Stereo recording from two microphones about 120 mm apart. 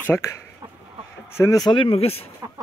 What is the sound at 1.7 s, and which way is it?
Speech, 45° left (ahead or behind).